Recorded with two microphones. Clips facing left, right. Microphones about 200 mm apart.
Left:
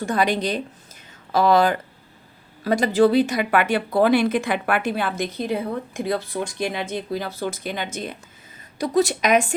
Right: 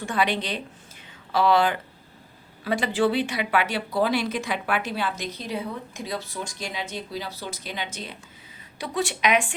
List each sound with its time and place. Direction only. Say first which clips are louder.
0.0 s a woman's voice: left 4 dB; 40° left (ahead or behind)